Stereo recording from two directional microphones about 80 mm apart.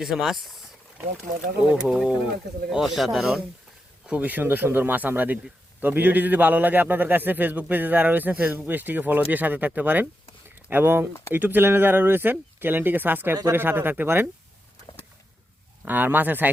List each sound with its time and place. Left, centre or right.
0.0 s speech: centre
1.7 s speech: centre
4.0 s a man's voice: centre
15.8 s a man's voice: right